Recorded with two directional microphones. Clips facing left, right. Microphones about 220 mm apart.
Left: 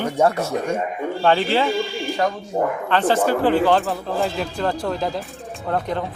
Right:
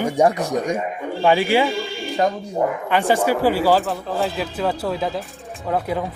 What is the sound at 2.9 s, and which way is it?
Speech, 10° right (ahead or behind).